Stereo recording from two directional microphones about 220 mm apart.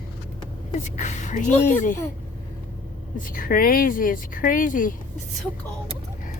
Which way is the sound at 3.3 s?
40° left (ahead or behind).